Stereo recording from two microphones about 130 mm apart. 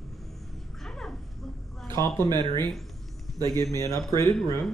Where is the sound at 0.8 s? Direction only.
5° left (ahead or behind).